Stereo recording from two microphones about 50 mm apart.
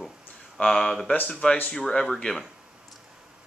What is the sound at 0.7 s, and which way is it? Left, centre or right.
Speech, centre.